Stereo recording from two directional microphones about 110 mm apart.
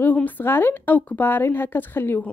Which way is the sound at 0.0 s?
15° left (ahead or behind).